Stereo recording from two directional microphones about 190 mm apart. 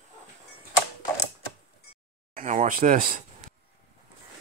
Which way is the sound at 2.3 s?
40° right (ahead or behind).